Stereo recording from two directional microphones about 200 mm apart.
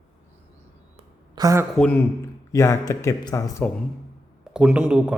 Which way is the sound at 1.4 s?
15° right (ahead or behind).